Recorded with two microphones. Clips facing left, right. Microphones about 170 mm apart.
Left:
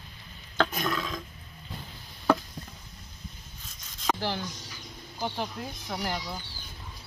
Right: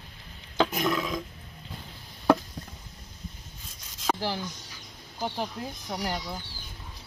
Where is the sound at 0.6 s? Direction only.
10° right (ahead or behind).